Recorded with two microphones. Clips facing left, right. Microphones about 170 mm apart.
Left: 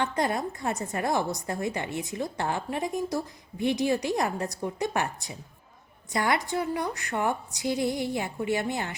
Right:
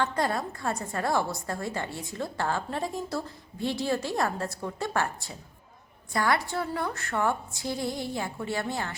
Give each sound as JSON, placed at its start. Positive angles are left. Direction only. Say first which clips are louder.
{"t": 0.0, "sound": "a woman's voice", "louder": "left 1 dB", "side_deg": 20}